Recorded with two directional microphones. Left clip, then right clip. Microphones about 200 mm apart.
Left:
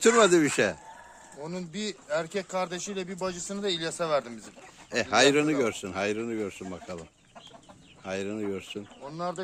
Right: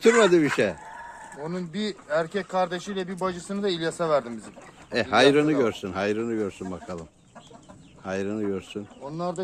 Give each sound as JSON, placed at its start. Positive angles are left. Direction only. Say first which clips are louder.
{"t": 0.0, "sound": "speech", "louder": "right 2 dB", "side_deg": 25}
{"t": 8.0, "sound": "speech", "louder": "right 4 dB", "side_deg": 10}
{"t": 9.0, "sound": "speech", "louder": "right 3 dB", "side_deg": 0}